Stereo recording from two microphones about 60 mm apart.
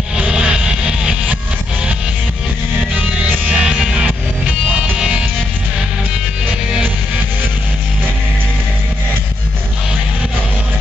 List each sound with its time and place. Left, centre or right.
0.2 s vehicle: centre
3.4 s music: centre